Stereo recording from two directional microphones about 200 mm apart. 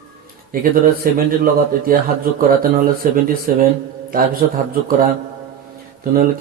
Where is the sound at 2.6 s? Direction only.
45° right (ahead or behind).